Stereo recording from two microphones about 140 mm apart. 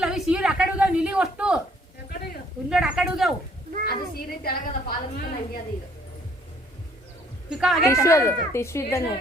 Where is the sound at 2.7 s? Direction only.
5° right (ahead or behind).